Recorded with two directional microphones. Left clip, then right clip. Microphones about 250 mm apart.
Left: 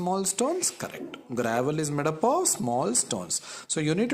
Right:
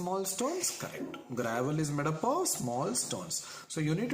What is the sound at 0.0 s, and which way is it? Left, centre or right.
Speech, left.